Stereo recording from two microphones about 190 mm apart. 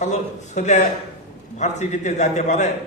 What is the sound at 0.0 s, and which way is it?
A man's voice, 40° left (ahead or behind).